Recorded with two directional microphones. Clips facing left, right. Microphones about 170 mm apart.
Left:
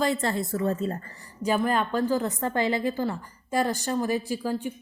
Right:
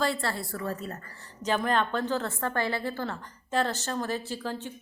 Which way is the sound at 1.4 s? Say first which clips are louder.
Left 2 dB; 10° left (ahead or behind).